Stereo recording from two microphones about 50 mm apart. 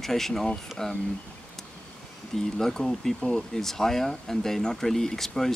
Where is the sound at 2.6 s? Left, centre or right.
Centre.